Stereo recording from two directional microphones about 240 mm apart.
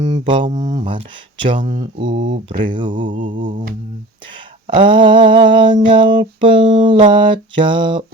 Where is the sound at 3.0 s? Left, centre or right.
Right.